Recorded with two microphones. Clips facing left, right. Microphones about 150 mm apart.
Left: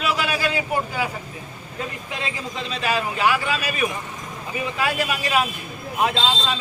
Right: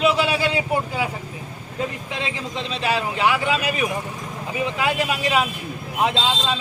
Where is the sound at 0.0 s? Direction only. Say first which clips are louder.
Right 4 dB; 25° right (ahead or behind).